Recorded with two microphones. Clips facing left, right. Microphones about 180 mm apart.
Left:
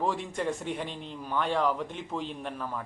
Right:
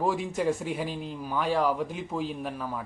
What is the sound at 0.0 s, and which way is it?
A man's voice, 5° right (ahead or behind).